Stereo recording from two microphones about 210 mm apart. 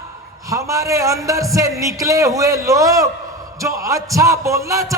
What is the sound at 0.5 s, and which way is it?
A man's voice, 15° right (ahead or behind).